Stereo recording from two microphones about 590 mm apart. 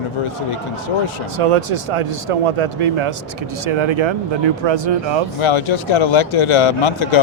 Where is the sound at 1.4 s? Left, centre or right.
Right.